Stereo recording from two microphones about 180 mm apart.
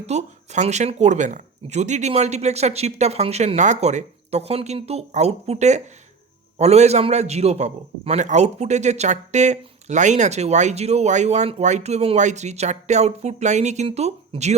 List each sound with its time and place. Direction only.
0.0 s a man's voice: 40° right (ahead or behind)